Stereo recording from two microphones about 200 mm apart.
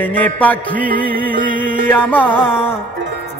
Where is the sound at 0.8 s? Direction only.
45° right (ahead or behind).